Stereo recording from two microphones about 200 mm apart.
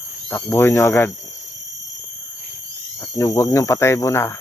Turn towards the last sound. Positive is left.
turn(degrees=15)  # may be behind; listen again after turning